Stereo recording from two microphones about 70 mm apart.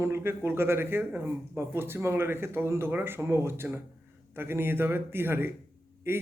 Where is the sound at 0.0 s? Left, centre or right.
Right.